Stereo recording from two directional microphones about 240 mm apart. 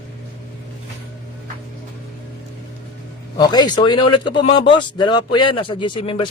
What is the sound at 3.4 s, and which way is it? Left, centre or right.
Speech, centre.